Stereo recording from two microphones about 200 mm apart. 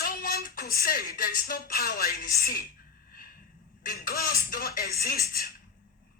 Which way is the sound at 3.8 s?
45° left (ahead or behind).